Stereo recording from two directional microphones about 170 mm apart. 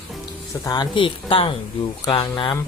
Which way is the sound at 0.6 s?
25° left (ahead or behind).